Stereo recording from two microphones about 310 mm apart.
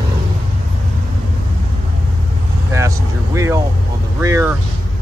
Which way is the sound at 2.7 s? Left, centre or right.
Centre.